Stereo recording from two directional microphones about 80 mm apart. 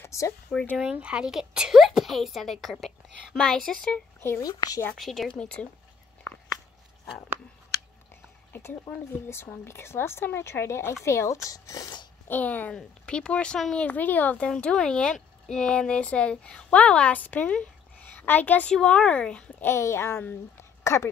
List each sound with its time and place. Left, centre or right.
0.0 s a sound: left
0.5 s speech: centre
0.7 s a woman's voice: centre
4.4 s a woman's voice: left
4.9 s a woman's voice: centre
8.5 s a woman's voice: left
12.3 s speech: left
18.7 s speech: centre
19.6 s a woman's voice: left